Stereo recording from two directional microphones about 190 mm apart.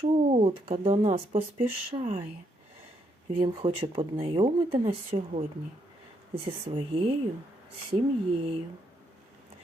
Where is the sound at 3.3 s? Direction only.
25° right (ahead or behind).